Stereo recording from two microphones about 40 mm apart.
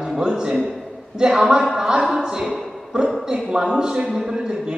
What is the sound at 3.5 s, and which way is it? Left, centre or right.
A man's voice, centre.